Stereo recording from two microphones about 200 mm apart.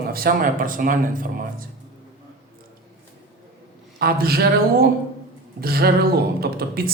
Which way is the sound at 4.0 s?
50° right (ahead or behind).